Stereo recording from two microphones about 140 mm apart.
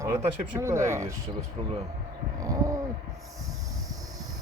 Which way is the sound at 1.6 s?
50° right (ahead or behind).